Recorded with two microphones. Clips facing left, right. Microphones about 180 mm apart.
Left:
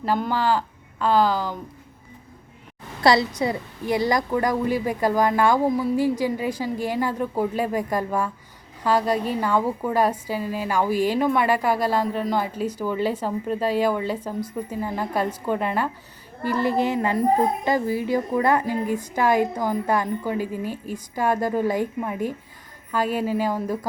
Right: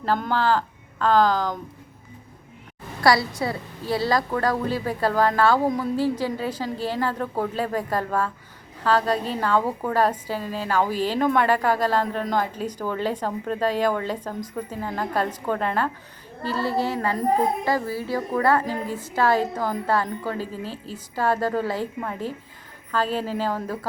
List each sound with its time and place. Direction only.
0.0 s speech: 10° left (ahead or behind)
3.0 s a woman's voice: 20° left (ahead or behind)